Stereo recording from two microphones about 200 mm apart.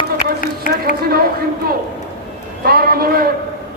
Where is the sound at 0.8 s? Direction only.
50° right (ahead or behind).